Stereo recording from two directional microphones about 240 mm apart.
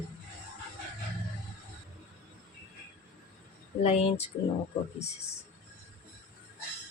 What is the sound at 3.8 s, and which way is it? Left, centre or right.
Speech, left.